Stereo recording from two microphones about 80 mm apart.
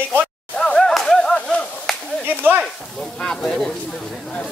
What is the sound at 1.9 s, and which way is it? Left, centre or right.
Clapping, centre.